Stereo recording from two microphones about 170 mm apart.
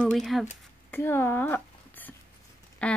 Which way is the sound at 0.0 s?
Centre (ahead or behind).